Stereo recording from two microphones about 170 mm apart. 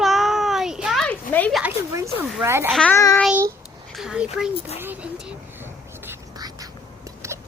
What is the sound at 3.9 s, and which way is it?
Speech, 5° right (ahead or behind).